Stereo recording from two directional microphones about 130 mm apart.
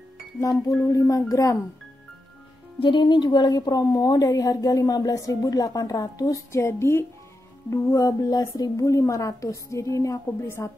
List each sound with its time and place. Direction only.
0.4 s a woman's voice: 25° left (ahead or behind)
2.8 s a woman's voice: 35° left (ahead or behind)